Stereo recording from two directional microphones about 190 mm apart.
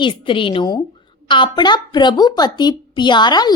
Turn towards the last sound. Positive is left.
turn(degrees=20)  # may be behind; listen again after turning